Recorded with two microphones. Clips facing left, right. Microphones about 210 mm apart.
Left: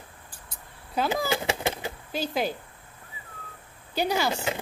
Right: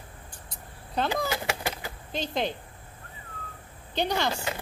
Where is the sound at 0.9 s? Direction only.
5° left (ahead or behind).